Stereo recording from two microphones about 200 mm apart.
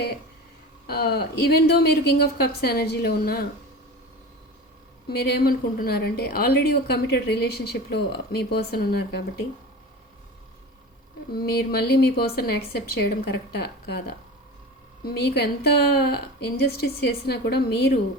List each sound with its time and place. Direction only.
0.9 s a woman's voice: 50° left (ahead or behind)
5.0 s a woman's voice: 55° left (ahead or behind)
11.3 s a woman's voice: 50° left (ahead or behind)
15.0 s a woman's voice: 55° left (ahead or behind)